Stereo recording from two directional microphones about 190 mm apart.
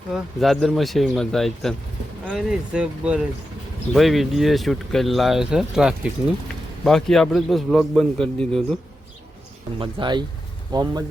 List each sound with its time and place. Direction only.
0.1 s speech: centre (ahead or behind)
9.7 s speech: 25° right (ahead or behind)